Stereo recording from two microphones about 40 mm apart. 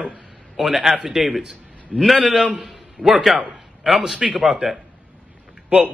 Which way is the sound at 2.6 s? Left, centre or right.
Centre.